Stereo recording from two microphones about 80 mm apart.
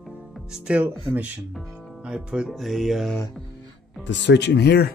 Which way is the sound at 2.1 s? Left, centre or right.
Centre.